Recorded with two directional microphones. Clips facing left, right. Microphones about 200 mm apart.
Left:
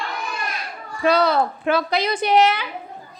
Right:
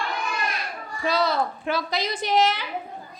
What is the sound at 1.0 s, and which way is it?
A woman's voice, 65° left (ahead or behind).